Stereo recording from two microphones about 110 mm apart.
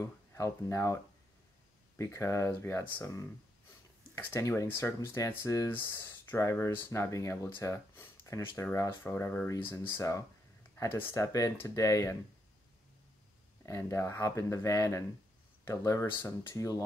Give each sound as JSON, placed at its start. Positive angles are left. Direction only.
{"t": 0.0, "sound": "speech", "side_deg": 25}
{"t": 4.2, "sound": "speech", "side_deg": 25}
{"t": 13.7, "sound": "speech", "side_deg": 25}